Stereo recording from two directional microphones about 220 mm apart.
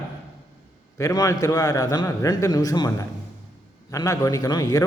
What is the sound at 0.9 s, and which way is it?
A man's voice, 15° left (ahead or behind).